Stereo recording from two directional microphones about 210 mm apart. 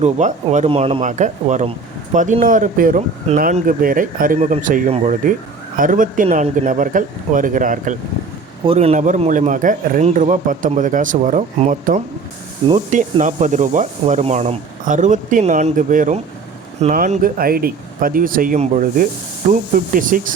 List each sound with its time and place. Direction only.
0.0 s speech: 35° right (ahead or behind)
8.6 s speech: 30° right (ahead or behind)